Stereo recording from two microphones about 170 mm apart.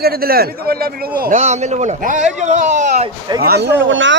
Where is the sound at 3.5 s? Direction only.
90° right.